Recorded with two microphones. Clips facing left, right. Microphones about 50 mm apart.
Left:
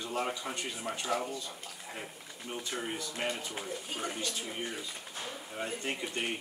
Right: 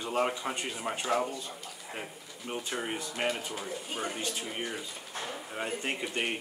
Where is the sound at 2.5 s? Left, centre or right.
Centre.